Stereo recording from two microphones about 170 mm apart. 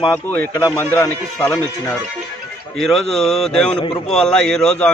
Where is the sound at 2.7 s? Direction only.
Centre (ahead or behind).